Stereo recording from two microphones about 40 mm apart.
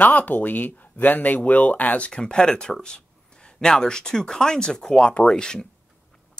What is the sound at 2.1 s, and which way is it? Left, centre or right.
Speech, centre.